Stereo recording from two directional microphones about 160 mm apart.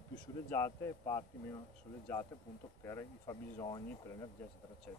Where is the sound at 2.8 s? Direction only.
15° left (ahead or behind).